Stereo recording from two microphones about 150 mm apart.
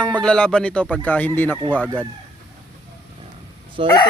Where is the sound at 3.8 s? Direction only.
35° right (ahead or behind).